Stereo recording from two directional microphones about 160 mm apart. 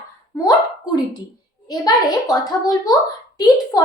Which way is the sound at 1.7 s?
25° left (ahead or behind).